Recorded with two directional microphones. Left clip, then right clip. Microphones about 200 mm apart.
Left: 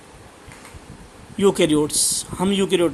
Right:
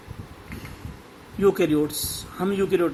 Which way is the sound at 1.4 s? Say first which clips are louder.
Left 3 dB; 45° left (ahead or behind).